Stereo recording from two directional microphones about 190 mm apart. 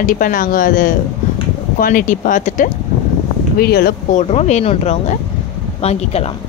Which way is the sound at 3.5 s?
55° left (ahead or behind).